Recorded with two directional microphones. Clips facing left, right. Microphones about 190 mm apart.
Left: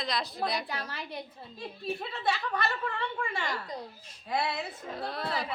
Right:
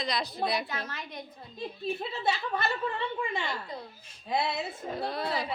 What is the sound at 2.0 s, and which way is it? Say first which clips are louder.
A woman's voice: even; 25° right (ahead or behind).